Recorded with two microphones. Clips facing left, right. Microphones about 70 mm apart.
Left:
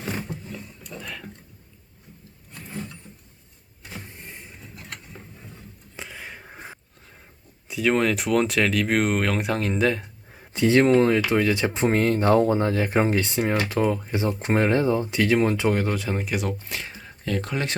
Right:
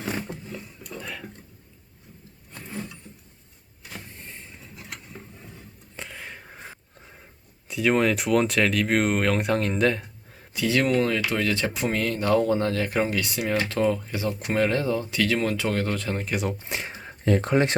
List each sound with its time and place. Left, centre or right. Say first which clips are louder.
0.9 s tick-tock: even; centre
6.0 s a sound: left 1 dB; centre
7.7 s speech: even; centre
10.5 s speech: left 5 dB; left; by 14.1 s centre
14.1 s speech: left 3 dB; left; by 16.5 s centre
16.6 s speech: right 2 dB; right